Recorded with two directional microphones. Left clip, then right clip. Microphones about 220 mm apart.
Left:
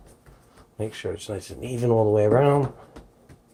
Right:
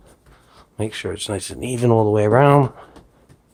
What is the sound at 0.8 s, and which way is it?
Speech, 30° right (ahead or behind).